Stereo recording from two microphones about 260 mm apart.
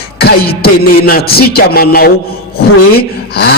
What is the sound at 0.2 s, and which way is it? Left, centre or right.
Speech, left.